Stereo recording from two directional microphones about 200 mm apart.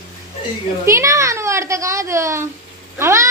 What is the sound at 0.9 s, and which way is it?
Speech, 15° right (ahead or behind).